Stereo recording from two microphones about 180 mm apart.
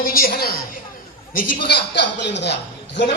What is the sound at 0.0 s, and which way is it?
A woman's voice, 55° left (ahead or behind).